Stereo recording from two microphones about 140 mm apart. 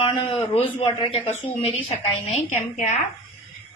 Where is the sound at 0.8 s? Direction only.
40° left (ahead or behind).